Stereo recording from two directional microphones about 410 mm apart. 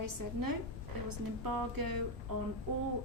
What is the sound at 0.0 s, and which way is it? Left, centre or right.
A woman's voice, right.